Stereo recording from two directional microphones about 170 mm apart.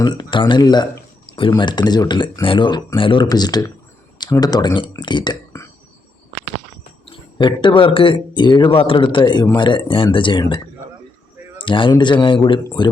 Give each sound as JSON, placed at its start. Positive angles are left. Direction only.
{"t": 0.0, "sound": "speech", "side_deg": 30}
{"t": 7.0, "sound": "speech", "side_deg": 30}
{"t": 11.6, "sound": "speech", "side_deg": 30}